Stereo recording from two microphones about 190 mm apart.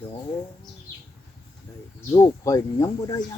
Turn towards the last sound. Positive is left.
turn(degrees=15)  # may be behind; listen again after turning